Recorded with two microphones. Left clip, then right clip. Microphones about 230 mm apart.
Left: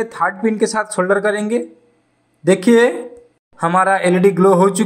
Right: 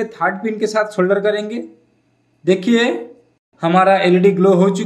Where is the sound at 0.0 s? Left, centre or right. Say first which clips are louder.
Left 1 dB; centre.